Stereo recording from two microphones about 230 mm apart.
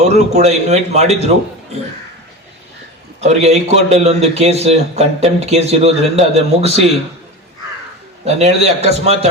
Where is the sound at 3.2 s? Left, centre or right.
Right.